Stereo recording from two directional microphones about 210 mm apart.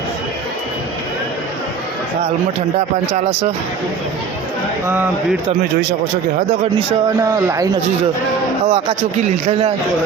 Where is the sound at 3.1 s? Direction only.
30° right (ahead or behind).